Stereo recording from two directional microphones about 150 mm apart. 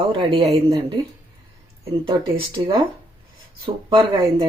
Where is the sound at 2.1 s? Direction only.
30° right (ahead or behind).